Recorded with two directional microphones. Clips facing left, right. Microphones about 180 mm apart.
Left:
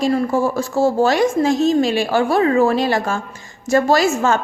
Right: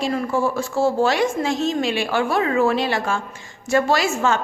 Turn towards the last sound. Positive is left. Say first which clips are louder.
# left 4 dB
turn(degrees=40)  # may be behind; listen again after turning